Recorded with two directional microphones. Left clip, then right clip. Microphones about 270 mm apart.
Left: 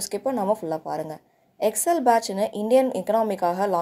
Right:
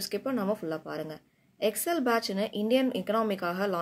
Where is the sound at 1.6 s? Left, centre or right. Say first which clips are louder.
Left 8 dB; centre.